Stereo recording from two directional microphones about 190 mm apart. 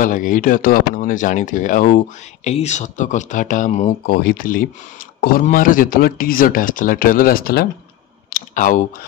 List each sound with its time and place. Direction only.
0.0 s speech: 45° left (ahead or behind)
4.0 s speech: 50° left (ahead or behind)
8.3 s clicking: 45° left (ahead or behind)